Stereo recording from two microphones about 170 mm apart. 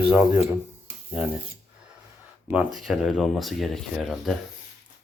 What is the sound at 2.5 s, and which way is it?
Speech, 5° right (ahead or behind).